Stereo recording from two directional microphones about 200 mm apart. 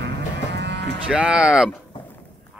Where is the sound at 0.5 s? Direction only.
60° right (ahead or behind).